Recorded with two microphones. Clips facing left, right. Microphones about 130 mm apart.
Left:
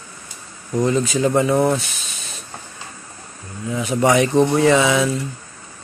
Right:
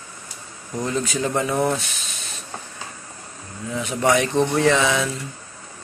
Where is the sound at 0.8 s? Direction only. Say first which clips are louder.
Left 6 dB; 5° left (ahead or behind).